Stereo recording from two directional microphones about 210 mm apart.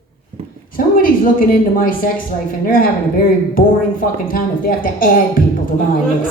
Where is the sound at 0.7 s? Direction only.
40° left (ahead or behind).